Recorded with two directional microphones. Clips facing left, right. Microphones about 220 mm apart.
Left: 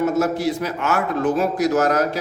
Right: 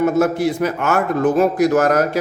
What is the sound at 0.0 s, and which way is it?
A man's voice, 55° right (ahead or behind).